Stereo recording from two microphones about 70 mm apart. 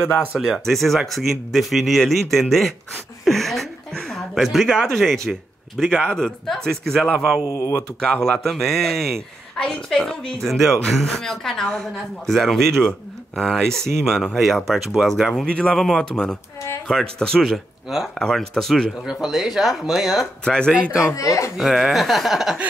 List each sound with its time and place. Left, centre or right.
0.4 s speech: centre
3.3 s a sound: centre
6.0 s a woman's voice: centre
7.4 s speech: left
7.7 s a woman's voice: centre
15.4 s a woman's voice: centre
17.8 s speech: centre
18.2 s a woman's voice: centre
19.2 s speech: centre
20.4 s a woman's voice: centre
21.1 s speech: left
21.5 s speech: centre